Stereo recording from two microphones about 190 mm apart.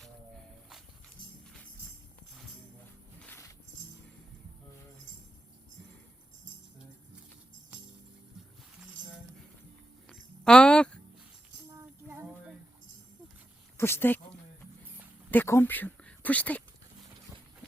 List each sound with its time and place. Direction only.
3.2 s music: 15° left (ahead or behind)
10.1 s a sound: 5° left (ahead or behind)
11.8 s music: 15° right (ahead or behind)
13.7 s speech: 15° left (ahead or behind)
15.3 s speech: 10° left (ahead or behind)